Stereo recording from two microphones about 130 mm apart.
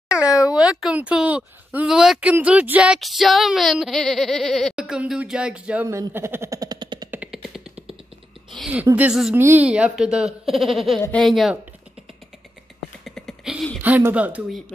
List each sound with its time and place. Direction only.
0.1 s speech: 10° right (ahead or behind)
5.9 s speech: 20° right (ahead or behind)
7.1 s a sound: 5° right (ahead or behind)
8.9 s speech: 5° right (ahead or behind)
9.3 s speech: 15° right (ahead or behind); by 11.5 s centre (ahead or behind)
13.0 s a sound: centre (ahead or behind)
13.8 s speech: 15° right (ahead or behind)